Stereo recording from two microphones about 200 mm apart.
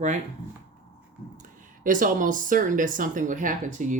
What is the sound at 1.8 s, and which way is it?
Speech, 40° right (ahead or behind).